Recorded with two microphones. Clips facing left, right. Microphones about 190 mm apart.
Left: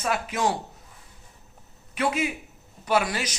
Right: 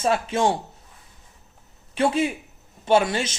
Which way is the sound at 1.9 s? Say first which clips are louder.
Right 4 dB; 30° right (ahead or behind).